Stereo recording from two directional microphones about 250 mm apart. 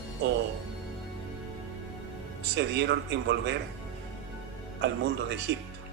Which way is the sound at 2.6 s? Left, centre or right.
Right.